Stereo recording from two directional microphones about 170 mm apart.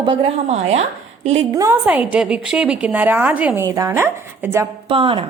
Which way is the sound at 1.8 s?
10° right (ahead or behind).